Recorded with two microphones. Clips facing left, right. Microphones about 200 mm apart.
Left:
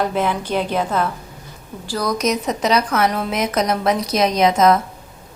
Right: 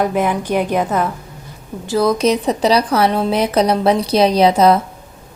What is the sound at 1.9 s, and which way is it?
A woman's voice, 25° right (ahead or behind).